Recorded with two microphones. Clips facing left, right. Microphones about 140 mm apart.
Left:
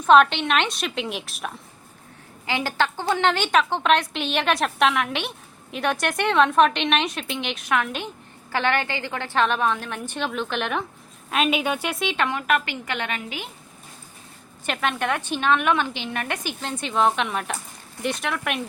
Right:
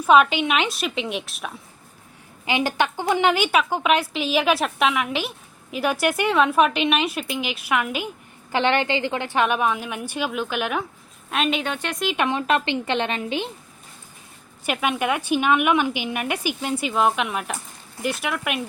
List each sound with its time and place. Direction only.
0.0 s a woman's voice: 5° right (ahead or behind)
2.5 s a woman's voice: 15° right (ahead or behind)
8.5 s a woman's voice: 20° right (ahead or behind); by 12.1 s 5° left (ahead or behind)
12.1 s a woman's voice: 20° right (ahead or behind)
14.7 s a woman's voice: 10° right (ahead or behind)